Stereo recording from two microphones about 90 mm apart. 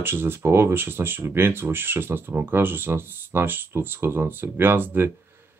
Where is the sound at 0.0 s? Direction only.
25° right (ahead or behind).